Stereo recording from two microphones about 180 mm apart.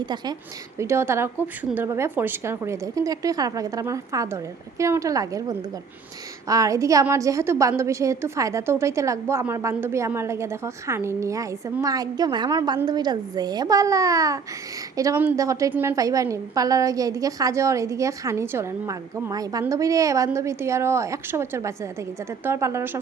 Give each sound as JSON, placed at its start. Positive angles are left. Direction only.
{"t": 0.0, "sound": "a woman's voice", "side_deg": -25}